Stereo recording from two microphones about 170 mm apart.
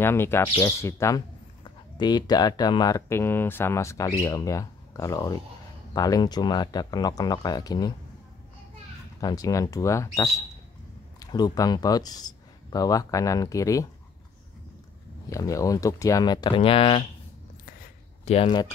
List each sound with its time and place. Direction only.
0.0 s speech: 15° left (ahead or behind)
9.2 s speech: 20° left (ahead or behind)
15.2 s speech: 20° left (ahead or behind)
18.2 s speech: 35° left (ahead or behind)